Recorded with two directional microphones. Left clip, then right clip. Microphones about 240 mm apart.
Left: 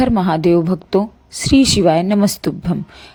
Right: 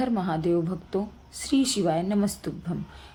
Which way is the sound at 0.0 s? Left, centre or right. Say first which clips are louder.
Left 12 dB; left.